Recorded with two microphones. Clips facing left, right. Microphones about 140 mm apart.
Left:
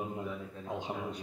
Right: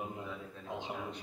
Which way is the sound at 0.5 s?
10° left (ahead or behind).